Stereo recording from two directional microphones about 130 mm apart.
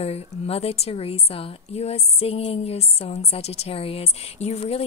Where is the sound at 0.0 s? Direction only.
50° left (ahead or behind).